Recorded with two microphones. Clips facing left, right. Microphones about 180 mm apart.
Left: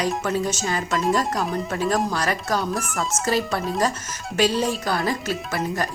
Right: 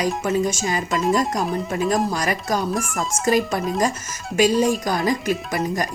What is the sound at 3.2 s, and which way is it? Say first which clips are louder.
Speech: right 5 dB; 15° right (ahead or behind).